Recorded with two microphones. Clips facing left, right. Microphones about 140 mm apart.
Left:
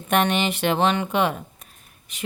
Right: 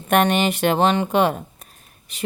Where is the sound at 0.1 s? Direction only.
45° right (ahead or behind).